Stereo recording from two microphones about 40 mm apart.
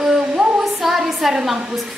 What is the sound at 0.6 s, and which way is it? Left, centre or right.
Speech, centre.